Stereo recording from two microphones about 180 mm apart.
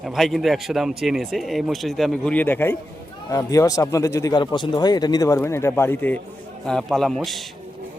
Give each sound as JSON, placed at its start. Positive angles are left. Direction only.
{"t": 0.0, "sound": "a man's voice", "side_deg": 0}